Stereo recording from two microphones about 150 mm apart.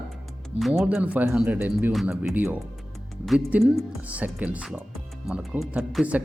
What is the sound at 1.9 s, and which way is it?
Speech, centre (ahead or behind).